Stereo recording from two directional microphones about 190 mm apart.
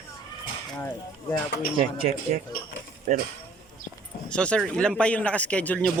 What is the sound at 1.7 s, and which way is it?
Speech, 30° right (ahead or behind).